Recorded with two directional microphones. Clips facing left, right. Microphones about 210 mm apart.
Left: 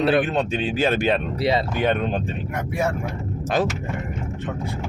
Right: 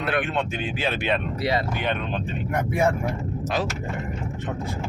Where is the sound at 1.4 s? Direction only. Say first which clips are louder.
Left 3 dB; 25° left (ahead or behind).